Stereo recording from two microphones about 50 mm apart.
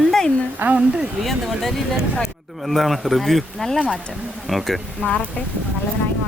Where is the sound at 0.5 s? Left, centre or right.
Right.